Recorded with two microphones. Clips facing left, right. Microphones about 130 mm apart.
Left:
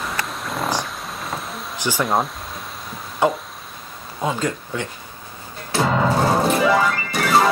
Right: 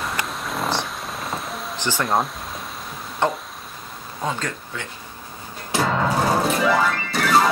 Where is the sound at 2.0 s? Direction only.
Centre (ahead or behind).